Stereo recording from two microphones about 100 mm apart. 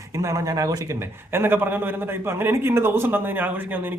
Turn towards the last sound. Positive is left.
turn(degrees=-20)  # may be behind; listen again after turning